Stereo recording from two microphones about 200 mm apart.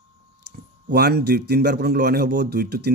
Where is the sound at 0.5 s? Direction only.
55° right (ahead or behind).